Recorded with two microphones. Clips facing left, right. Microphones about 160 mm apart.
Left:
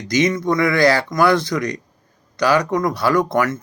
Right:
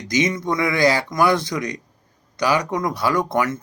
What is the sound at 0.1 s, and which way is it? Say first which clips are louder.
Speech: left 3 dB; 15° right (ahead or behind).